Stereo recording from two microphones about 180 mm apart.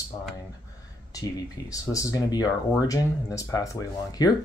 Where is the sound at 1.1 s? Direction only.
20° left (ahead or behind).